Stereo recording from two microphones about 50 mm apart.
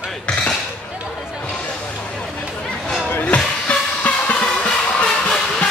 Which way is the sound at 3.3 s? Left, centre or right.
Left.